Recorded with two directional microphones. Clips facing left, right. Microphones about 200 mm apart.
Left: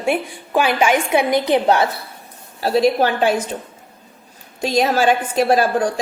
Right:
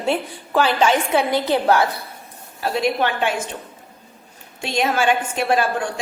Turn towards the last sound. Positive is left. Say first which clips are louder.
# left 4 dB
turn(degrees=35)  # may be behind; listen again after turning